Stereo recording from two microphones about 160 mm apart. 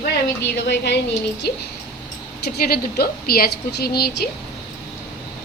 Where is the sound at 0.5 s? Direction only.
90° left.